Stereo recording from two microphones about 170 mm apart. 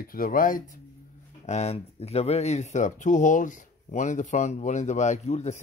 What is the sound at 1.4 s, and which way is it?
Speech, 40° left (ahead or behind).